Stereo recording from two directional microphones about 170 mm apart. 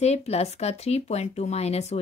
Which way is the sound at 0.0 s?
40° left (ahead or behind).